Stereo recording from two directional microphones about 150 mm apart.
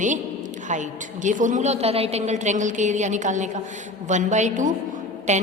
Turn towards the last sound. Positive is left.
turn(degrees=-50)  # may be behind; listen again after turning